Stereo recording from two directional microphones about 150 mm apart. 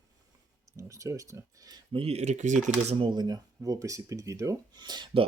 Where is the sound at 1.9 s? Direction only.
45° right (ahead or behind).